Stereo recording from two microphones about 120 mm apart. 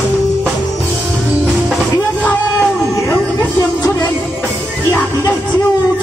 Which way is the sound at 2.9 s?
20° left (ahead or behind).